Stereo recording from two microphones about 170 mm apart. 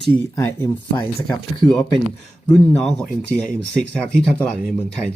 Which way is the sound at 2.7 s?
5° left (ahead or behind).